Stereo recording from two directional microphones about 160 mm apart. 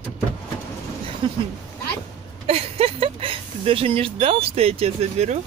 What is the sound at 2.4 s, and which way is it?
Speech, 40° right (ahead or behind).